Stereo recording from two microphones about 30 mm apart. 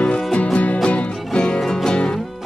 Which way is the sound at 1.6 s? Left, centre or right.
Centre.